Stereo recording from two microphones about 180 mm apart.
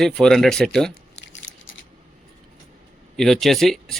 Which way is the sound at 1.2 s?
90° left.